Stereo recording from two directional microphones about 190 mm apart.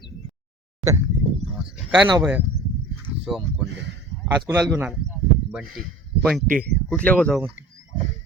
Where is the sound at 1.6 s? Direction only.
5° right (ahead or behind).